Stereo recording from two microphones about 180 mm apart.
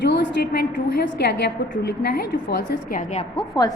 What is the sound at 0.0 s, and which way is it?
A woman's voice, 75° left (ahead or behind).